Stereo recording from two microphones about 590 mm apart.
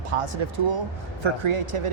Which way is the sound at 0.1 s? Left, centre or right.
Right.